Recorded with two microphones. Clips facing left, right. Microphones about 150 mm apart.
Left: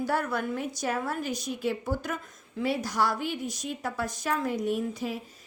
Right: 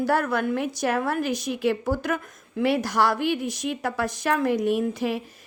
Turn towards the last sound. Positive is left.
turn(degrees=-80)